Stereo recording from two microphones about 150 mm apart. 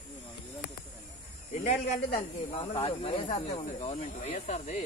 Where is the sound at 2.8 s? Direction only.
40° left (ahead or behind).